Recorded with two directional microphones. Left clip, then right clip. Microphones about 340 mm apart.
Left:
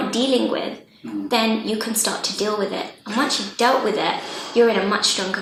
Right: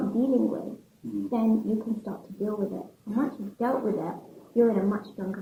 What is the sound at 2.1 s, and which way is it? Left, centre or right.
A woman's voice, centre.